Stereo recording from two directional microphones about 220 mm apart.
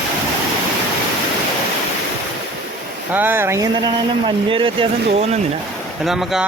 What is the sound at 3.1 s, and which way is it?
Speech, 10° right (ahead or behind).